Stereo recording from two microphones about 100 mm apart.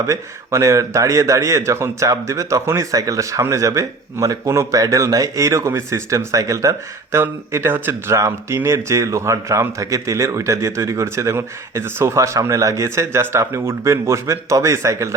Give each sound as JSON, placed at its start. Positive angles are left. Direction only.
{"t": 0.0, "sound": "a man's voice", "side_deg": -30}